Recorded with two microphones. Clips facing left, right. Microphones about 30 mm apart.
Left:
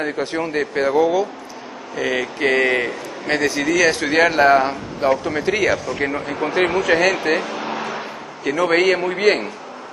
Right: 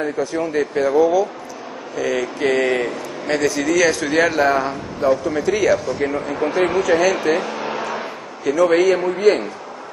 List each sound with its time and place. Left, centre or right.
0.0 s a man's voice: left
0.4 s speech: left
3.6 s speech: centre
3.9 s a man's voice: left
7.4 s a sound: centre
8.5 s speech: left
8.7 s a man's voice: left